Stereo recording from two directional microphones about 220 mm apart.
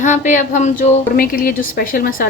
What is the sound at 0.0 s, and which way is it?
A woman's voice, 35° left (ahead or behind).